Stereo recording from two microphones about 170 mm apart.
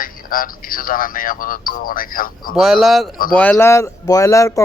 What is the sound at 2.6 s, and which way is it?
A woman's voice, centre (ahead or behind).